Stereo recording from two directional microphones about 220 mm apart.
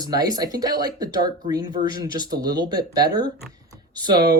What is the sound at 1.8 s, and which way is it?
Speech, 30° right (ahead or behind).